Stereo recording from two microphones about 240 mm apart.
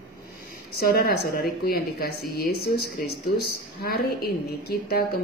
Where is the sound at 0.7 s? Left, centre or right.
Left.